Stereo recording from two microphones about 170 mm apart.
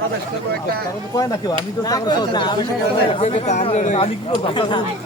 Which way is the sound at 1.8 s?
25° left (ahead or behind).